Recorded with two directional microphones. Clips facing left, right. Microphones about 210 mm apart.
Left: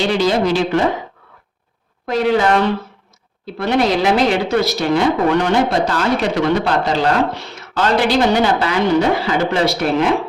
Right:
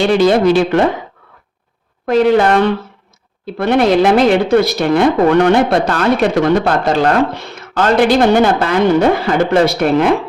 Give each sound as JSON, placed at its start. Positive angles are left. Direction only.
{"t": 0.1, "sound": "a woman's voice", "side_deg": -55}
{"t": 2.0, "sound": "speech", "side_deg": -55}